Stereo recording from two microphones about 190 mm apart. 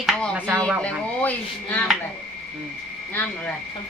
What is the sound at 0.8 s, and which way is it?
Speech, 10° left (ahead or behind).